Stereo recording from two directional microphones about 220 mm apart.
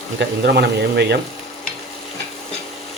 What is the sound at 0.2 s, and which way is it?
Speech, 50° right (ahead or behind).